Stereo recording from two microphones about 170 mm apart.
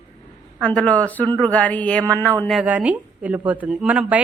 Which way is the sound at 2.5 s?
5° right (ahead or behind).